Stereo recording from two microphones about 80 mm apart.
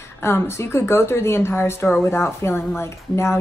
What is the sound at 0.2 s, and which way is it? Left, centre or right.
Speech, left.